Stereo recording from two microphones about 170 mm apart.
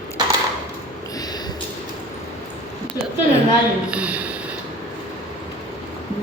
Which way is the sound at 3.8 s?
5° right (ahead or behind).